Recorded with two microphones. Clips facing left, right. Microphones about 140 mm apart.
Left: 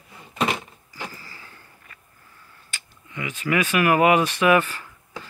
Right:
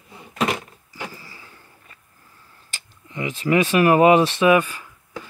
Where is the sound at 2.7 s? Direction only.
30° right (ahead or behind); by 4.8 s 15° right (ahead or behind).